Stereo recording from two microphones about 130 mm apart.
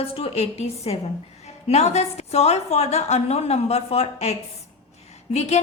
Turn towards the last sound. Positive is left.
turn(degrees=55)  # may be behind; listen again after turning